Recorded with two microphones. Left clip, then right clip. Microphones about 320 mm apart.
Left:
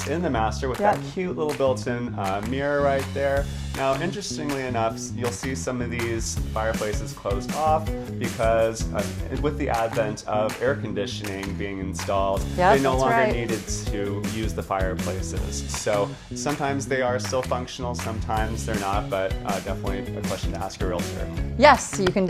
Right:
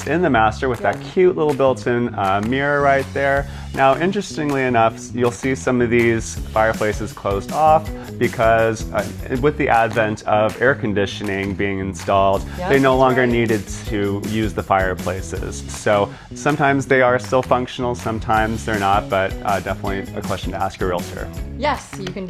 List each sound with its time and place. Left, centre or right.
0.1 s speech: right
7.3 s speech: right
13.9 s speech: right
20.3 s speech: right
21.6 s chopping: left